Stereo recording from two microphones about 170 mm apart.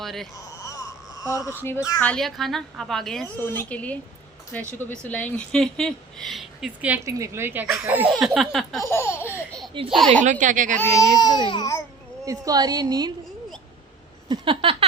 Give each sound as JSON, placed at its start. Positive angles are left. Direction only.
{"t": 0.0, "sound": "speech", "side_deg": 0}
{"t": 0.6, "sound": "whimper", "side_deg": 20}
{"t": 2.0, "sound": "speech", "side_deg": 5}
{"t": 8.9, "sound": "laughter", "side_deg": 15}
{"t": 10.1, "sound": "a woman's voice", "side_deg": -45}
{"t": 10.8, "sound": "speech", "side_deg": 15}
{"t": 12.2, "sound": "a woman's voice", "side_deg": -20}
{"t": 14.3, "sound": "a sound", "side_deg": -30}